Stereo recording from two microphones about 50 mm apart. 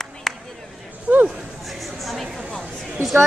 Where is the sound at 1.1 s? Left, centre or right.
Right.